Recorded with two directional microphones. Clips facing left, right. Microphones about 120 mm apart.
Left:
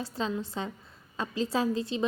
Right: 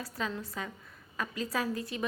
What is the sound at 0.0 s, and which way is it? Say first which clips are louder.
A woman's voice: left 4 dB; 25° left (ahead or behind).